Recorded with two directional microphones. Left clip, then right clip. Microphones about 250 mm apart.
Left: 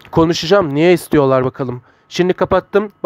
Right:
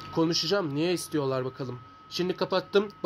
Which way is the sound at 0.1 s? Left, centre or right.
Left.